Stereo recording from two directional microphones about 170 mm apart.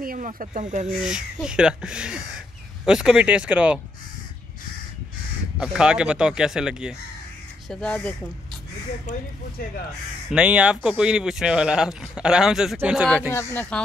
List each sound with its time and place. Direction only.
0.0 s speech: 55° right (ahead or behind)
0.8 s speech: 5° right (ahead or behind)
5.6 s speech: 5° right (ahead or behind)
7.7 s speech: 5° left (ahead or behind)
9.1 s speech: 45° left (ahead or behind)
10.3 s speech: 5° right (ahead or behind)
13.3 s speech: 15° left (ahead or behind)